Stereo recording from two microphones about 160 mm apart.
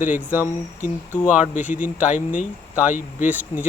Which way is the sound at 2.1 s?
50° left (ahead or behind).